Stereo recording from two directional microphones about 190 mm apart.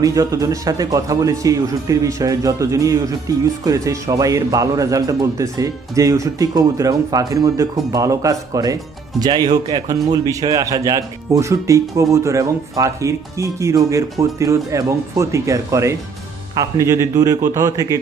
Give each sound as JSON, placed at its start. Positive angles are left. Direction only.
{"t": 0.0, "sound": "speech", "side_deg": -20}